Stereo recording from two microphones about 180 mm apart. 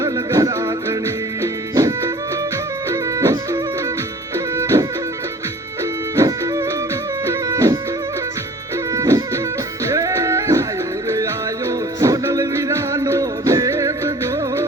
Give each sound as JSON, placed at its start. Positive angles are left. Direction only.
{"t": 0.0, "sound": "music", "side_deg": -15}
{"t": 6.1, "sound": "music", "side_deg": -20}
{"t": 8.9, "sound": "music", "side_deg": -20}